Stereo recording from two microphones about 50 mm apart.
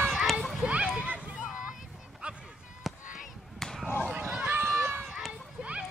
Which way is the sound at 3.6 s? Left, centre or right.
Centre.